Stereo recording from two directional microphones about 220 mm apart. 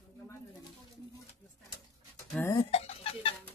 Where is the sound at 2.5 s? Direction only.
25° left (ahead or behind).